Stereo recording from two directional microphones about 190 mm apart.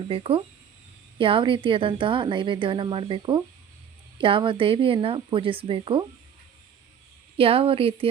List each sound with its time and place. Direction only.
0.1 s a woman's voice: 30° right (ahead or behind)
7.3 s a woman's voice: 30° right (ahead or behind)